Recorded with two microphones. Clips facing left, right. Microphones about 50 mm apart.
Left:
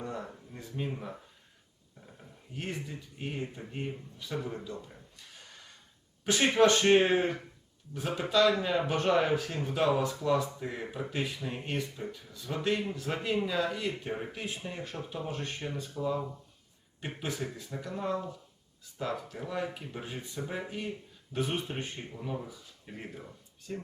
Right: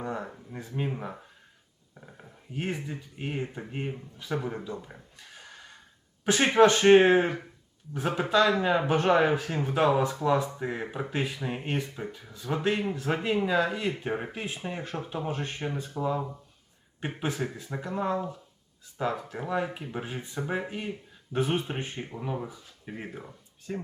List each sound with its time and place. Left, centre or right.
0.0 s a sound: right
0.5 s speech: right
6.2 s speech: right